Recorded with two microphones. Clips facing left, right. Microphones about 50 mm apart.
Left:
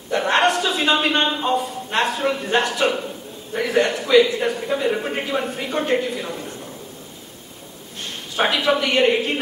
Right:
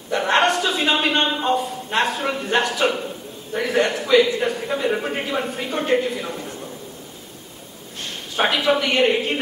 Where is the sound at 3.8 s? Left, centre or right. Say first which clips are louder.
Left 1 dB; right.